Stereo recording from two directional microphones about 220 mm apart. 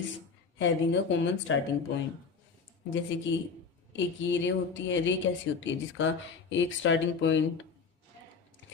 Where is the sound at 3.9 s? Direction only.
55° left (ahead or behind).